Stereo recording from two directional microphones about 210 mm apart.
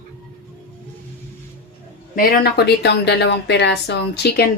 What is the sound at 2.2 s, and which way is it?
Speech, 50° left (ahead or behind).